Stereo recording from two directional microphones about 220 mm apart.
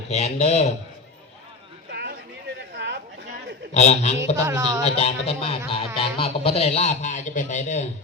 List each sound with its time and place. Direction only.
0.1 s speech: 30° left (ahead or behind)
1.9 s a sound: 50° right (ahead or behind)
2.7 s chatter: 50° right (ahead or behind)
3.8 s speech: 30° left (ahead or behind)
4.4 s speech: 15° right (ahead or behind)
4.9 s speech: 30° left (ahead or behind)